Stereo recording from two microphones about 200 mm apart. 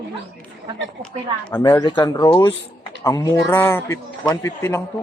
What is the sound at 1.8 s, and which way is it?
A man's voice, 20° left (ahead or behind).